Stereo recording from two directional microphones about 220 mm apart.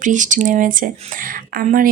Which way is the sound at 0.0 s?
35° right (ahead or behind).